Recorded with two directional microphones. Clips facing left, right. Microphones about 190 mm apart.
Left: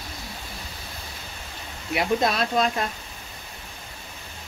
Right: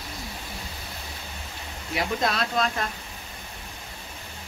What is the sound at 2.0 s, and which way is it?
Speech, 20° left (ahead or behind).